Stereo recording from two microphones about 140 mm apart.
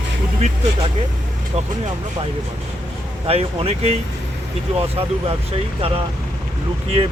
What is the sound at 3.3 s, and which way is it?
Speech, 45° right (ahead or behind).